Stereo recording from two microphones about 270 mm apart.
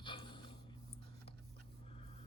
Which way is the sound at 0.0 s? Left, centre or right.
Centre.